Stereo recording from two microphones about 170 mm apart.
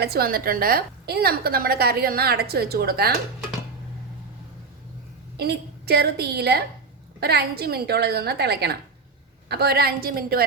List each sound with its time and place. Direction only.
0.0 s a woman's voice: 65° right (ahead or behind)
5.4 s a woman's voice: 70° right (ahead or behind)